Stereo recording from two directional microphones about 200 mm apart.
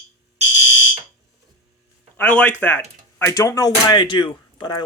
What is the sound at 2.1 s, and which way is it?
Speech, 5° left (ahead or behind).